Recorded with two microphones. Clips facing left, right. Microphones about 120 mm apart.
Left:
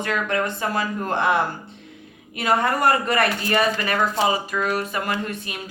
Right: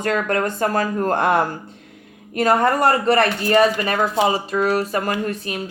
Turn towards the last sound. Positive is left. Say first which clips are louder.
# right 4 dB
turn(degrees=-40)  # may be behind; listen again after turning